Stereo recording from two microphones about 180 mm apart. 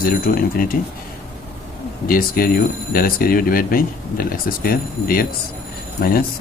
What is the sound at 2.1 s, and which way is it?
Speech, 55° left (ahead or behind).